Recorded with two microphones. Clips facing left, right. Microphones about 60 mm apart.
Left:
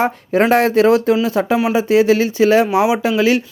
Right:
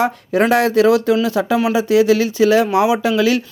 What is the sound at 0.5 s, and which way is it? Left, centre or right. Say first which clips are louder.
Speech: left 1 dB; left.